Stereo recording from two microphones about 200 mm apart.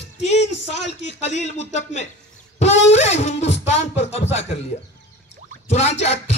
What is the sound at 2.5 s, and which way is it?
Guitar, 35° left (ahead or behind).